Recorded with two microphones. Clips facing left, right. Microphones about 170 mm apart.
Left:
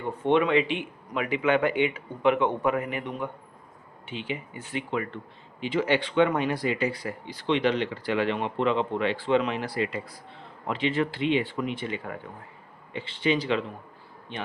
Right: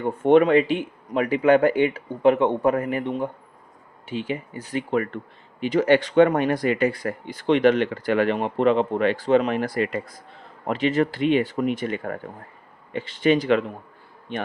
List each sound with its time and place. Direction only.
0.0 s speech: 45° right (ahead or behind)
4.0 s speech: 45° right (ahead or behind)